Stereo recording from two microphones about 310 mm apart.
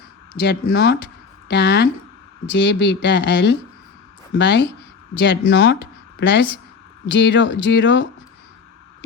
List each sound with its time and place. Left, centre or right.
0.4 s speech: left